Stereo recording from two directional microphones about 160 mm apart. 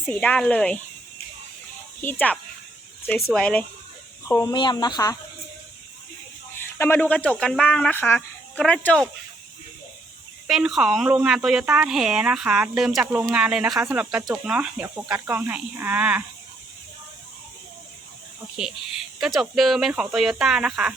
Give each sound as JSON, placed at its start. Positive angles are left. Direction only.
{"t": 0.0, "sound": "speech", "side_deg": 10}
{"t": 2.0, "sound": "speech", "side_deg": 10}
{"t": 4.3, "sound": "speech", "side_deg": 15}
{"t": 4.5, "sound": "speech", "side_deg": 30}
{"t": 6.6, "sound": "speech", "side_deg": 15}
{"t": 10.4, "sound": "speech", "side_deg": 0}
{"t": 18.5, "sound": "speech", "side_deg": -5}